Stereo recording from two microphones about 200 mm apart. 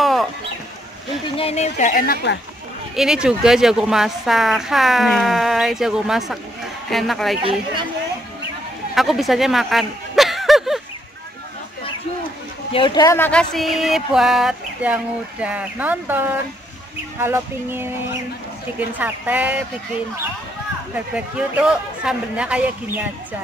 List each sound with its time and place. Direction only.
0.0 s a sound: centre (ahead or behind)
1.3 s speech: 30° left (ahead or behind)
3.0 s a woman's voice: 5° right (ahead or behind)
8.9 s speech: centre (ahead or behind)
12.7 s a woman's voice: 20° left (ahead or behind); by 15.0 s 5° right (ahead or behind)
15.4 s a sound: 5° right (ahead or behind)
20.9 s a woman's voice: 5° right (ahead or behind)